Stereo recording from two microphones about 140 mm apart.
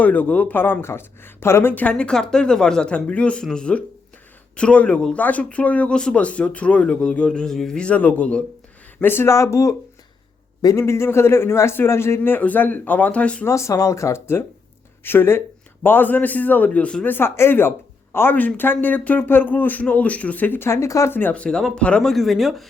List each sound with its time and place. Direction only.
0.0 s a man's voice: 10° left (ahead or behind)
13.5 s a man's voice: 20° left (ahead or behind); by 22.6 s centre (ahead or behind)